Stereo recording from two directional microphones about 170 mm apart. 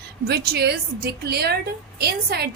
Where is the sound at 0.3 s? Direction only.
70° right (ahead or behind).